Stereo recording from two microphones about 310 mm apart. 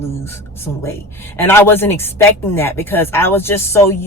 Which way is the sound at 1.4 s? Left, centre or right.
Centre.